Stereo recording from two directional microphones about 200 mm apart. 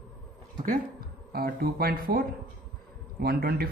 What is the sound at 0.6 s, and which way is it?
Speech, 45° right (ahead or behind).